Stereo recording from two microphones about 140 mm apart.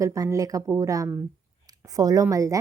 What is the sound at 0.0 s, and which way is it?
Speech, 20° right (ahead or behind).